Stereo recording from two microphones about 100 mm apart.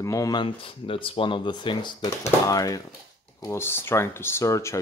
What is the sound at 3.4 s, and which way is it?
Speech, 25° left (ahead or behind).